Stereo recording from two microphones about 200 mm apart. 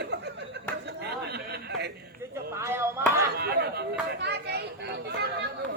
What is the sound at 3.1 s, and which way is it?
Chop, 50° right (ahead or behind).